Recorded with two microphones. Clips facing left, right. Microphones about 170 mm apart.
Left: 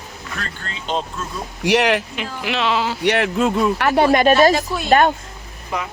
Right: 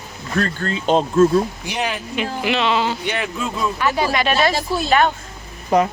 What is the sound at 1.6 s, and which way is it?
Speech, 80° left.